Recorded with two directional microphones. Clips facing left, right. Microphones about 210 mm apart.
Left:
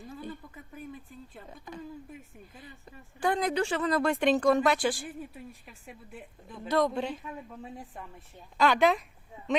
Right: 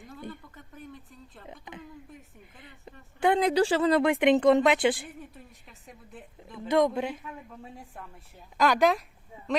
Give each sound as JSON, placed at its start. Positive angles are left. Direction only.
{"t": 0.1, "sound": "a sound", "side_deg": 5}
{"t": 1.5, "sound": "a woman's voice", "side_deg": -20}
{"t": 3.2, "sound": "a woman's voice", "side_deg": -25}
{"t": 4.0, "sound": "a woman's voice", "side_deg": -15}
{"t": 6.7, "sound": "a man's voice", "side_deg": -10}